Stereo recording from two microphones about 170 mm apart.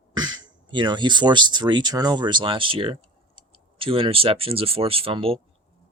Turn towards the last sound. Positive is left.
turn(degrees=-30)  # may be behind; listen again after turning